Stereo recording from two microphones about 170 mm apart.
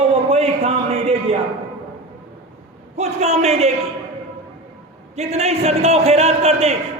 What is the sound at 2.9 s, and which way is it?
Speech, 40° right (ahead or behind).